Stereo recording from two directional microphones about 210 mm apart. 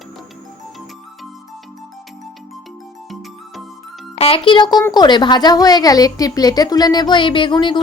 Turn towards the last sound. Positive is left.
turn(degrees=20)  # may be behind; listen again after turning